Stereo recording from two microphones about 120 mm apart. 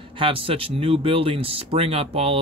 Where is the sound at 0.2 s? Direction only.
50° right (ahead or behind).